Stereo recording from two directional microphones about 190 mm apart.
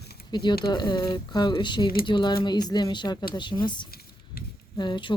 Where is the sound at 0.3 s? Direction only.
20° left (ahead or behind).